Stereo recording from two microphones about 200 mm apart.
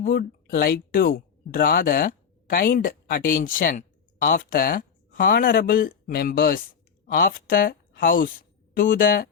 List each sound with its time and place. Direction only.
0.1 s a woman's voice: 50° left (ahead or behind)